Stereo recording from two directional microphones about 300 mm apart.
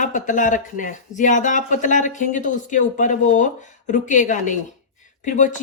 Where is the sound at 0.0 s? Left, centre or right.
Left.